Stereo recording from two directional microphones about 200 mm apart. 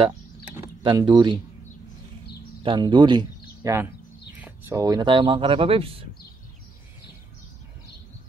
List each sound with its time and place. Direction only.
0.6 s speech: 20° right (ahead or behind)
2.6 s speech: 25° right (ahead or behind)